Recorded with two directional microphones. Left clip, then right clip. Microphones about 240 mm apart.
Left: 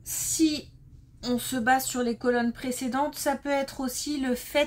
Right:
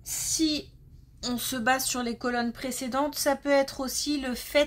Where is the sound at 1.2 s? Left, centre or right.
Right.